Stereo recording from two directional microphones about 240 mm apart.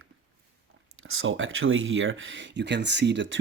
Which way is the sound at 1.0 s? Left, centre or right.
Right.